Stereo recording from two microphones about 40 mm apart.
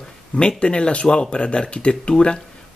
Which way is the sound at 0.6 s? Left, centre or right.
Left.